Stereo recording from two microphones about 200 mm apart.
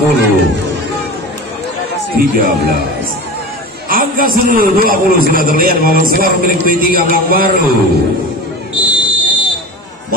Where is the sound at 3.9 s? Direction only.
45° right (ahead or behind).